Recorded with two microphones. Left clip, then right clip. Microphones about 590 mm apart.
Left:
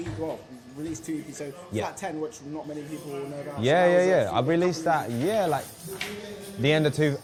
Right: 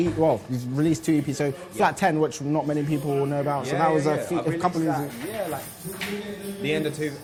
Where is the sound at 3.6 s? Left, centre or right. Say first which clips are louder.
Left 6 dB; left.